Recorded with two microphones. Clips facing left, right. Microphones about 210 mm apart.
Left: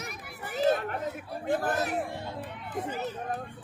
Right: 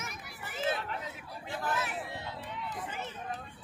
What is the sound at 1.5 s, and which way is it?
Speech, 50° left (ahead or behind).